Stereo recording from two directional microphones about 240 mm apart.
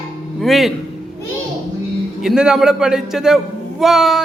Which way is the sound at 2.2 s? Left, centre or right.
Centre.